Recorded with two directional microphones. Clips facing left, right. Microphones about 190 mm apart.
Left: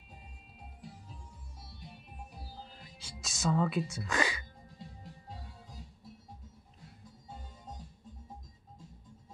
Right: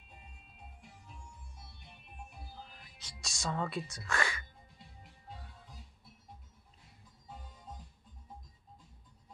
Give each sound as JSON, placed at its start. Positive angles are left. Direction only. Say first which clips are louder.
{"t": 2.3, "sound": "music", "louder": "left 2 dB", "side_deg": 35}
{"t": 3.0, "sound": "speech", "louder": "left 6 dB", "side_deg": 5}
{"t": 4.1, "sound": "music", "louder": "left 2 dB", "side_deg": 15}
{"t": 4.7, "sound": "music", "louder": "left 10 dB", "side_deg": 40}